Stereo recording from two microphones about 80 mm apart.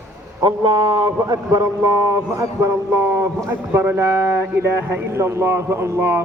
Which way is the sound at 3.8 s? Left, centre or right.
Right.